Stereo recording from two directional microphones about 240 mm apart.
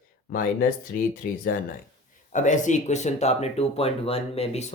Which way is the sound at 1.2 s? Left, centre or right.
Left.